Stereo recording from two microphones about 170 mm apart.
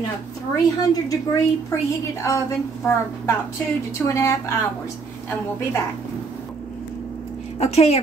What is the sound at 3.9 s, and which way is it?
Speech, 15° left (ahead or behind).